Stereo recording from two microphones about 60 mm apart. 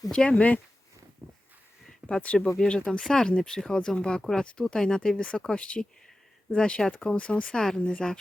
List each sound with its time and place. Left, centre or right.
0.1 s speech: centre
1.2 s a sound: right
2.0 s speech: centre